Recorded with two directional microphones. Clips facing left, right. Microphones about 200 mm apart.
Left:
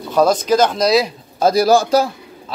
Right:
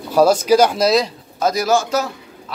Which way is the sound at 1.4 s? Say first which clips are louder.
Left 4 dB; 30° left (ahead or behind).